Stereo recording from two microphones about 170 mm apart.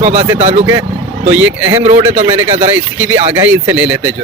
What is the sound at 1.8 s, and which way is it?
Speech, 40° right (ahead or behind).